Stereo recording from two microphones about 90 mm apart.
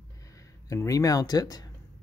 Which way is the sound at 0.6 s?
35° left (ahead or behind).